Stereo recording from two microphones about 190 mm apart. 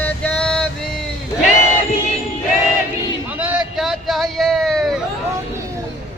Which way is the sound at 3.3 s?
10° right (ahead or behind).